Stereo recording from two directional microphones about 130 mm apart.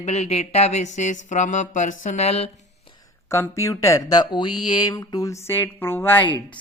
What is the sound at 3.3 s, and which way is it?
Speech, 20° left (ahead or behind).